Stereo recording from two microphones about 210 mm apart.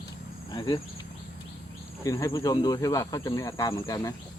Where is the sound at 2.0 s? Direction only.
15° left (ahead or behind).